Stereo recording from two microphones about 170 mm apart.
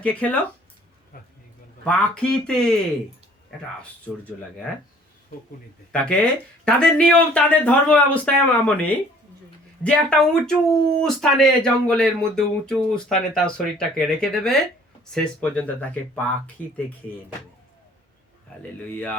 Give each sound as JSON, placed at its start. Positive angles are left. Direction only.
{"t": 0.0, "sound": "speech", "side_deg": 10}
{"t": 1.1, "sound": "speech", "side_deg": 60}
{"t": 1.8, "sound": "speech", "side_deg": 5}
{"t": 5.9, "sound": "speech", "side_deg": 5}
{"t": 9.8, "sound": "speech", "side_deg": 5}